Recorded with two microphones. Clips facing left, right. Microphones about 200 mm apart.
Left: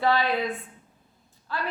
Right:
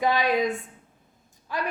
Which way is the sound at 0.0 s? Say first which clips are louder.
Right 1 dB; 15° right (ahead or behind).